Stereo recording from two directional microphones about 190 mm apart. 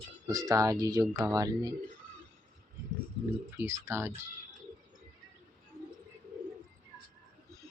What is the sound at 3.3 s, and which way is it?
Speech, 15° right (ahead or behind).